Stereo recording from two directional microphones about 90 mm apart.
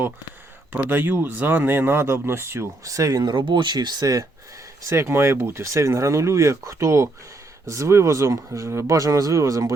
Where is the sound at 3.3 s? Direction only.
60° right (ahead or behind).